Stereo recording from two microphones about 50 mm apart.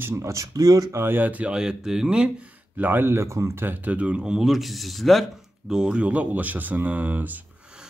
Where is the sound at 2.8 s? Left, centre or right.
Right.